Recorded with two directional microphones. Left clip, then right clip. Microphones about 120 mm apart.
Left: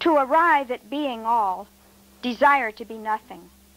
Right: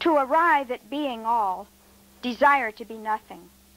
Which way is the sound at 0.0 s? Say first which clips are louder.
Left 2 dB; 40° right (ahead or behind).